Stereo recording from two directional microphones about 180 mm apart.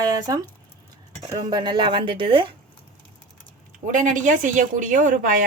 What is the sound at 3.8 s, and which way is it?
Speech, 45° right (ahead or behind).